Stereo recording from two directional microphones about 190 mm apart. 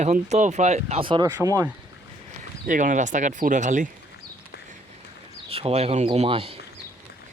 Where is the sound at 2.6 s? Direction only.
45° right (ahead or behind).